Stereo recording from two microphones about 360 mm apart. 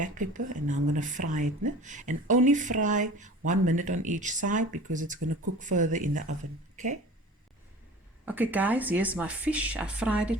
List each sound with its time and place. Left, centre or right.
0.0 s speech: right
8.2 s speech: centre